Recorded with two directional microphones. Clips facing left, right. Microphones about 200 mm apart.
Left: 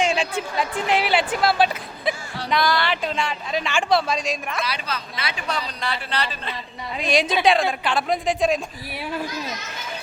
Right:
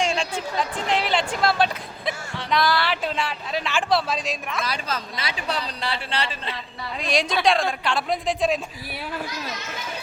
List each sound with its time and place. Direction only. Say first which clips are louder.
0.0 s a woman's voice: left 2 dB; 5° left (ahead or behind)
4.6 s speech: even; 45° right (ahead or behind); by 6.6 s 30° right (ahead or behind)
6.9 s speech: left 3 dB; centre (ahead or behind)